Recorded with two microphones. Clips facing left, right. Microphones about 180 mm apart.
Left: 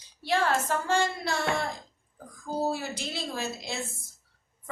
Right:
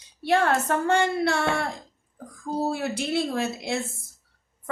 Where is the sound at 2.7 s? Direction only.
65° right (ahead or behind).